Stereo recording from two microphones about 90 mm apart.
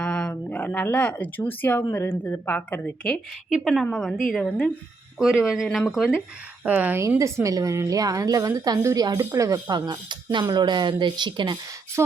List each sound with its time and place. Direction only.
0.0 s a woman's voice: 10° left (ahead or behind)
3.5 s a woman's voice: centre (ahead or behind)
5.2 s a woman's voice: 5° right (ahead or behind)
6.7 s speech: 20° right (ahead or behind)
7.2 s a woman's voice: 35° right (ahead or behind); by 11.5 s 60° right (ahead or behind)